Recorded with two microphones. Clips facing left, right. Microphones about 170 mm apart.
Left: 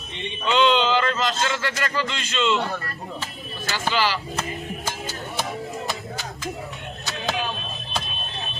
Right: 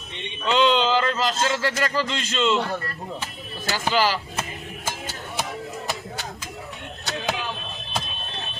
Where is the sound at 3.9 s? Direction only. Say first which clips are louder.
Right 2 dB; 40° right (ahead or behind).